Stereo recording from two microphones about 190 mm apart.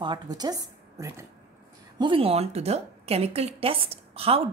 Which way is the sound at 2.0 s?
30° right (ahead or behind).